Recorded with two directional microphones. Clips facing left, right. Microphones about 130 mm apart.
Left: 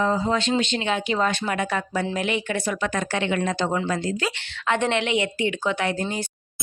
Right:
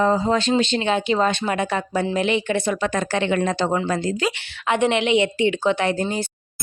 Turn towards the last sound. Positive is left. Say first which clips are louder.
# right 4 dB
turn(degrees=-30)  # may be behind; listen again after turning